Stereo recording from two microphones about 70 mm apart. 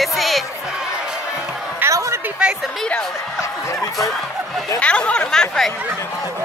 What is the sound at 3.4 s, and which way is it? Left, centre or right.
Speech, left.